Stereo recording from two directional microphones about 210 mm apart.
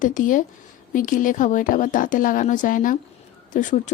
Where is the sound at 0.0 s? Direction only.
40° left (ahead or behind).